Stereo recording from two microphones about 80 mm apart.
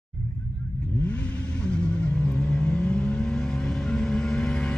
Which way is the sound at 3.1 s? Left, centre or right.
Centre.